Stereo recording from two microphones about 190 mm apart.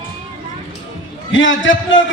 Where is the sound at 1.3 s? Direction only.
85° left.